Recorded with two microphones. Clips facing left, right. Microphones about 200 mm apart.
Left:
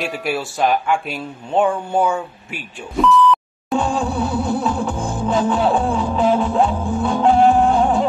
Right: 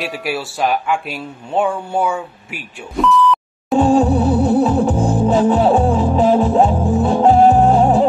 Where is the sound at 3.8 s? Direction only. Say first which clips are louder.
Right 8 dB; 45° right (ahead or behind).